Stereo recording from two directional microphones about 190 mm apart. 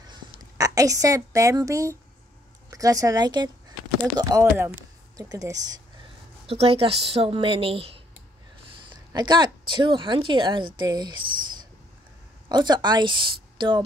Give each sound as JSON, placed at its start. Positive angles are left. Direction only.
{"t": 0.0, "sound": "a sound", "side_deg": -20}
{"t": 2.7, "sound": "a woman's voice", "side_deg": -20}
{"t": 6.4, "sound": "a woman's voice", "side_deg": -30}
{"t": 9.1, "sound": "a woman's voice", "side_deg": -25}